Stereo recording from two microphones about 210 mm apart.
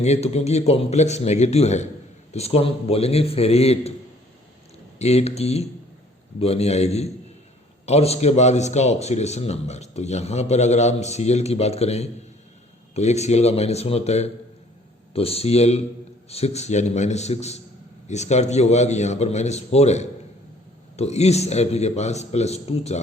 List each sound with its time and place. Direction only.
0.0 s a man's voice: 30° left (ahead or behind)
4.9 s a man's voice: 30° left (ahead or behind)